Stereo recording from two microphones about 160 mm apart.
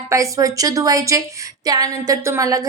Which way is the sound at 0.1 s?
20° right (ahead or behind).